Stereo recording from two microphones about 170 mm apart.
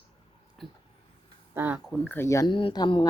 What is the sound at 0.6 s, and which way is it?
Speech, centre (ahead or behind).